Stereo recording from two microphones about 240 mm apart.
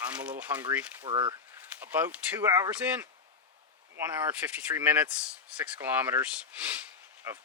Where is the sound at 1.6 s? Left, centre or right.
Centre.